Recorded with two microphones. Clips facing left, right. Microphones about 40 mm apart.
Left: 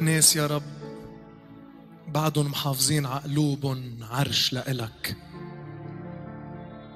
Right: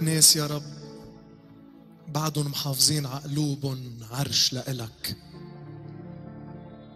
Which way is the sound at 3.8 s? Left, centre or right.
Left.